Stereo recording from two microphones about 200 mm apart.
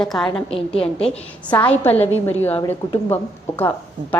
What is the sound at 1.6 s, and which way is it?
A woman's voice, 10° left (ahead or behind).